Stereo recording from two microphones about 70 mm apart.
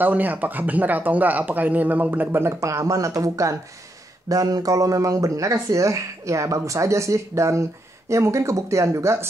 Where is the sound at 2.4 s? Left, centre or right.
Right.